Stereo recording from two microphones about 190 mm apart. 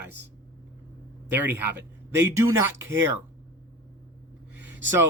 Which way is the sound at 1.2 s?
10° right (ahead or behind).